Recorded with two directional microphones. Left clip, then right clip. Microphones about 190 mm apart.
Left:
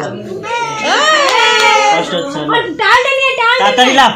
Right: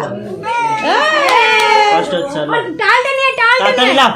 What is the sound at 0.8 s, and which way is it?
A child's voice, 55° right (ahead or behind).